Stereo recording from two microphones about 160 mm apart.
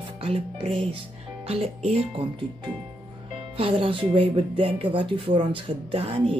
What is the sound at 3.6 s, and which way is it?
Speech, 35° right (ahead or behind).